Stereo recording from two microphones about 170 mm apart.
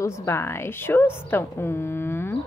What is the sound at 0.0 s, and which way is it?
A woman's voice, 15° left (ahead or behind).